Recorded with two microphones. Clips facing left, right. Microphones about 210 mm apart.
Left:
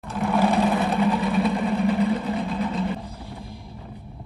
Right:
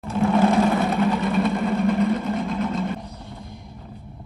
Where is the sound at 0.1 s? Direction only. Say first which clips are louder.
Right 4 dB; centre (ahead or behind).